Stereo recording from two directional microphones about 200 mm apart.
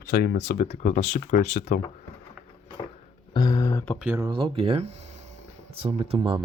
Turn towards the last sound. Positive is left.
turn(degrees=-25)  # may be behind; listen again after turning